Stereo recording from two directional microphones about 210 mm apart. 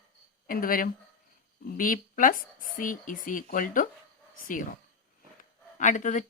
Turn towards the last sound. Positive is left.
turn(degrees=35)  # may be behind; listen again after turning